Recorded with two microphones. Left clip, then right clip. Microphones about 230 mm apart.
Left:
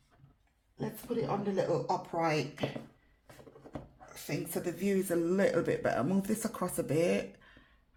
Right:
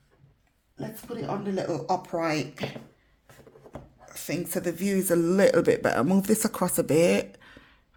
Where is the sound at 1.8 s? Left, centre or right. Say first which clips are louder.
Right 5 dB; right.